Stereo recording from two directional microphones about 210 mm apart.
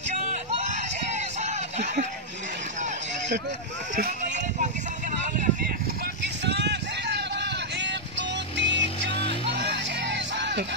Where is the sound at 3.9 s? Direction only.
35° right (ahead or behind).